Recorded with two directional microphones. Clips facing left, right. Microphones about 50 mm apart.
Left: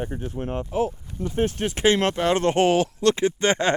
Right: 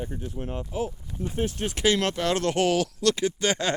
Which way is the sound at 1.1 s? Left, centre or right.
Right.